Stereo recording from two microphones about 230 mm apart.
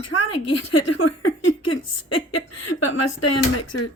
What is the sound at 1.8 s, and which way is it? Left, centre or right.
A woman's voice, left.